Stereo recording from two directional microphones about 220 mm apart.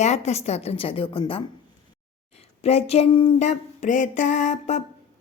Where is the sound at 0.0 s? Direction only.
30° left (ahead or behind).